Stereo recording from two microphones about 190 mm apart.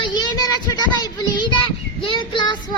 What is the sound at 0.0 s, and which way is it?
Child singing, 25° left (ahead or behind).